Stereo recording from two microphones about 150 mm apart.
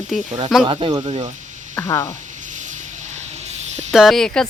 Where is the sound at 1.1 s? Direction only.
50° right (ahead or behind).